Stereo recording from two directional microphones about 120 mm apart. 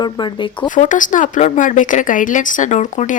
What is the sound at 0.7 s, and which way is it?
Speech, 90° left.